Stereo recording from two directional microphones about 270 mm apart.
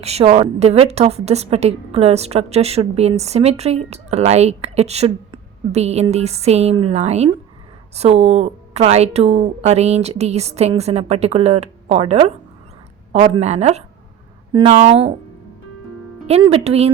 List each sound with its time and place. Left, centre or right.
0.0 s a woman's voice: right
13.4 s a woman's voice: right
16.2 s a woman's voice: right